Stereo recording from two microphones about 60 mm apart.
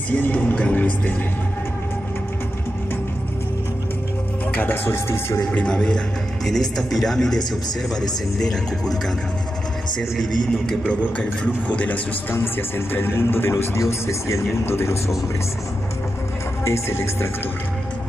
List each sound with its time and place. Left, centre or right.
0.1 s speech: left
4.5 s speech: left
4.9 s speech: left
5.7 s speech: centre
8.4 s speech: centre
10.1 s speech: centre
11.1 s speech: left
12.3 s speech: left
16.6 s speech: left